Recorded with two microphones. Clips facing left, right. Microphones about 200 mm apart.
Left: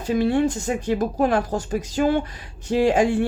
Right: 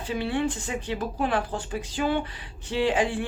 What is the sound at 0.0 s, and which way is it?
Speech, 40° left (ahead or behind).